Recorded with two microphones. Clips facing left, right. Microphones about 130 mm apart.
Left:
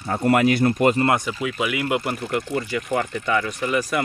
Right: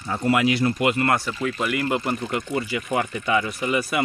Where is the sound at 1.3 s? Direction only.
5° left (ahead or behind).